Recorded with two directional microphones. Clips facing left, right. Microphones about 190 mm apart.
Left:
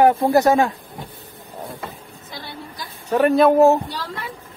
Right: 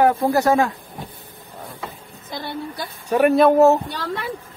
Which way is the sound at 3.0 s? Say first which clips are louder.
Right 1 dB; 10° right (ahead or behind).